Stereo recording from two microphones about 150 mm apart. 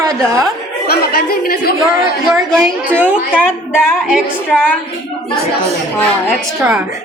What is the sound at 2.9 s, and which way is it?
A woman's voice, 10° right (ahead or behind).